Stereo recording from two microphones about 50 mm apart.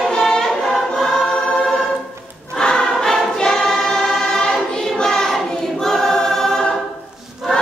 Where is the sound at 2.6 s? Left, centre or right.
Centre.